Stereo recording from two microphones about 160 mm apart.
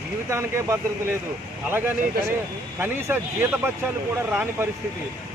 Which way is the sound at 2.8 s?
15° right (ahead or behind).